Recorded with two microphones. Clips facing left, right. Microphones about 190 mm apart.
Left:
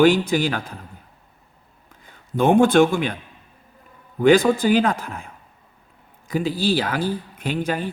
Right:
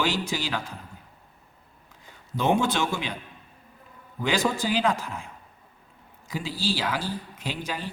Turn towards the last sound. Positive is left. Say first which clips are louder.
# left 9 dB
turn(degrees=55)  # may be behind; listen again after turning